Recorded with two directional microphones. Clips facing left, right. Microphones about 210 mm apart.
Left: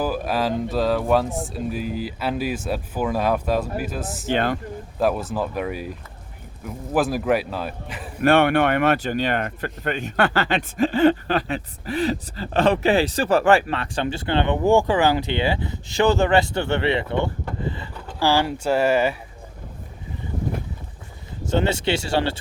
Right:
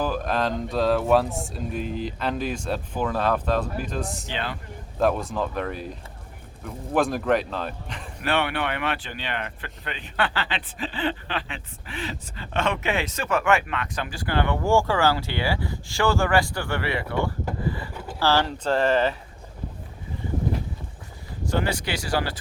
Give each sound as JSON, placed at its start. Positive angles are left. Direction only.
{"t": 0.0, "sound": "speech", "side_deg": 5}
{"t": 4.3, "sound": "speech", "side_deg": 50}
{"t": 4.9, "sound": "speech", "side_deg": 5}
{"t": 8.2, "sound": "speech", "side_deg": 50}
{"t": 21.4, "sound": "speech", "side_deg": 25}